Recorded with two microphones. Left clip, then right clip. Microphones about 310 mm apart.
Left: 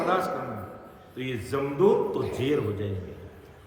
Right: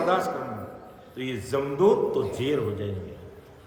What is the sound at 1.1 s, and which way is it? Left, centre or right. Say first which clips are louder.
A man's voice: right 2 dB; centre.